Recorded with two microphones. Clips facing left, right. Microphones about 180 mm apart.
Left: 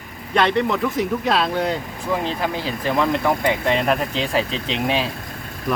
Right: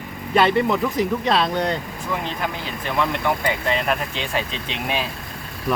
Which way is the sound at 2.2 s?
35° left (ahead or behind).